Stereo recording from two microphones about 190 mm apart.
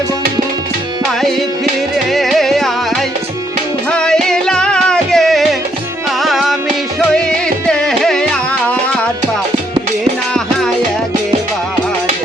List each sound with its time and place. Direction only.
2.1 s music: centre (ahead or behind)
3.9 s music: 5° left (ahead or behind)
7.7 s music: centre (ahead or behind)